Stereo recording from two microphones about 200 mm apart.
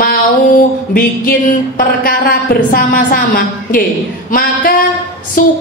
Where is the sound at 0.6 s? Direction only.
45° left (ahead or behind).